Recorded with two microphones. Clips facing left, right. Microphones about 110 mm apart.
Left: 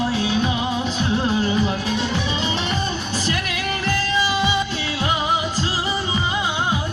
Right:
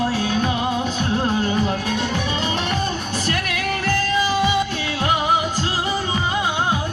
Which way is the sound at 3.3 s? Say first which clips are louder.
Right 3 dB; 50° right (ahead or behind).